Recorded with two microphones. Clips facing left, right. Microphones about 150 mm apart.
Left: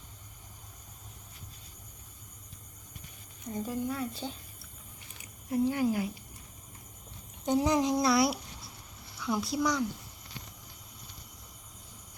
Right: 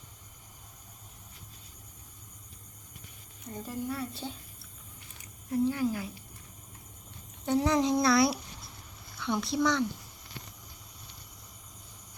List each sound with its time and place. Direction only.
3.5 s speech: centre (ahead or behind)
5.5 s speech: 15° left (ahead or behind)
7.4 s speech: 10° left (ahead or behind)